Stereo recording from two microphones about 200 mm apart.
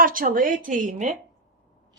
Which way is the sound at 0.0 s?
45° right (ahead or behind).